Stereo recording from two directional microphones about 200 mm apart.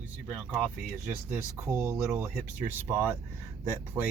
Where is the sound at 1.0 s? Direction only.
10° right (ahead or behind).